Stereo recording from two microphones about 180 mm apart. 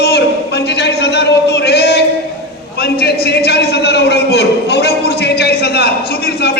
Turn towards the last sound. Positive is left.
turn(degrees=65)  # may be behind; listen again after turning